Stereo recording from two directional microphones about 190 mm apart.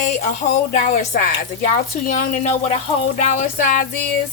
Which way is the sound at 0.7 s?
45° left (ahead or behind).